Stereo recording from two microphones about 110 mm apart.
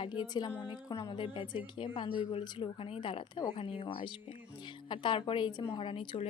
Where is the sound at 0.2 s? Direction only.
40° left (ahead or behind).